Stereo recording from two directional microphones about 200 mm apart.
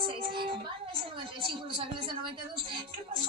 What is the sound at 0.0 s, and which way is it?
Child singing, 25° right (ahead or behind).